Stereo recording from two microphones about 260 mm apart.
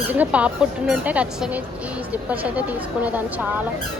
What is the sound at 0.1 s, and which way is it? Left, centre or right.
Speech, centre.